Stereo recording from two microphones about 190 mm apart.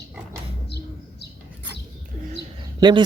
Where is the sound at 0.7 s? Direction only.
60° left (ahead or behind).